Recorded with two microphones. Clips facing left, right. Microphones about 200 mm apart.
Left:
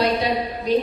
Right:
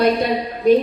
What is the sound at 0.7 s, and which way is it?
Speech, 50° right (ahead or behind).